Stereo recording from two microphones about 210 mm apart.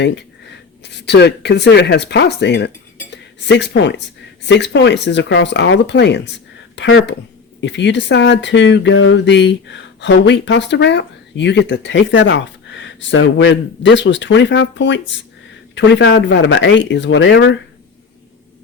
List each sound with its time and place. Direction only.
0.9 s speech: 55° left (ahead or behind)